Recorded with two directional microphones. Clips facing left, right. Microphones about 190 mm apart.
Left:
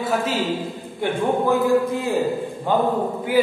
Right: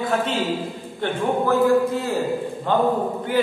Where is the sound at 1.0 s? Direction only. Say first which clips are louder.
Left 1 dB; 15° left (ahead or behind).